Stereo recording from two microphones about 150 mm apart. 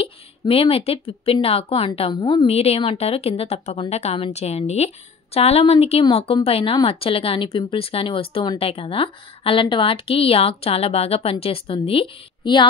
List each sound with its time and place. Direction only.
0.0 s a woman's voice: 40° left (ahead or behind)